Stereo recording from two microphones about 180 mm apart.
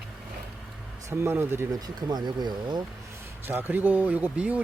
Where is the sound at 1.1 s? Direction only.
10° right (ahead or behind).